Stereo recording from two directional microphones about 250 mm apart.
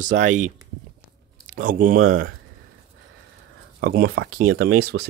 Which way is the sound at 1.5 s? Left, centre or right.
Right.